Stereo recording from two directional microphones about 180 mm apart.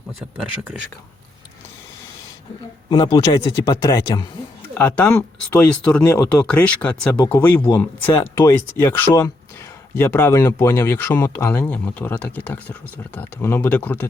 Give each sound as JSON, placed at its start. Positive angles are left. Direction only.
{"t": 2.9, "sound": "speech", "side_deg": 20}
{"t": 4.7, "sound": "speech", "side_deg": 10}